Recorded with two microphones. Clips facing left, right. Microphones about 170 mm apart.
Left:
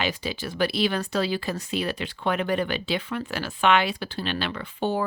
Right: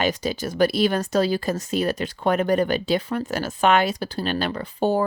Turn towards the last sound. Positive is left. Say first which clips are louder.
# right 5 dB
turn(degrees=-40)  # may be behind; listen again after turning